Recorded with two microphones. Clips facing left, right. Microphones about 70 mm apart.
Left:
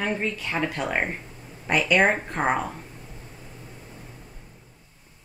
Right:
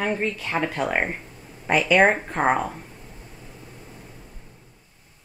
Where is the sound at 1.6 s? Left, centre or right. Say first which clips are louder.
Right 3 dB; centre.